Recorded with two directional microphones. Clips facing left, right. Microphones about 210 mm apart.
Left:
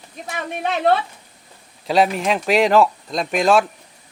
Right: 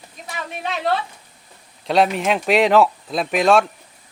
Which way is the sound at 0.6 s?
55° left (ahead or behind).